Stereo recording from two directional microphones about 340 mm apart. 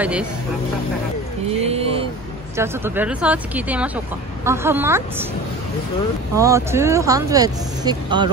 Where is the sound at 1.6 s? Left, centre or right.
Centre.